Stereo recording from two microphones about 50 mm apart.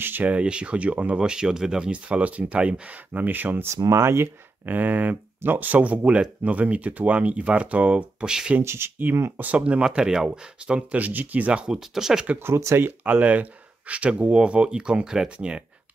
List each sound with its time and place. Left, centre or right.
0.0 s speech: right
0.3 s speech: right
1.9 s speech: right
3.1 s speech: right
3.6 s speech: right
4.6 s speech: right
8.3 s speech: centre
8.6 s speech: right
9.6 s speech: centre
11.0 s speech: right
11.6 s speech: centre
12.7 s speech: right
13.0 s speech: right